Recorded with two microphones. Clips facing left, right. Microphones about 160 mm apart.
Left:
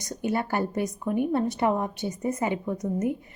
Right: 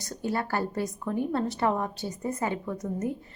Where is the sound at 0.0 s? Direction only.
20° left (ahead or behind).